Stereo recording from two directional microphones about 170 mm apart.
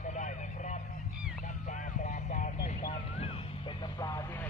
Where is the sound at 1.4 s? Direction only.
45° left (ahead or behind).